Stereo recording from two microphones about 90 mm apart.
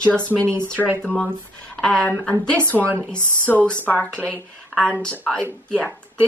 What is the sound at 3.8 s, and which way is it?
A woman's voice, 15° left (ahead or behind).